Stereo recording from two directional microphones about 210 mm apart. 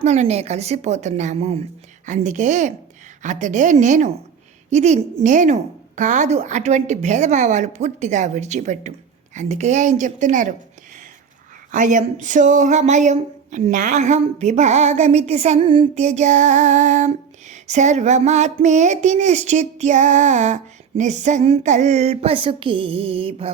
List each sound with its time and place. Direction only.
0.0 s speech: 30° right (ahead or behind)
11.7 s speech: 40° right (ahead or behind)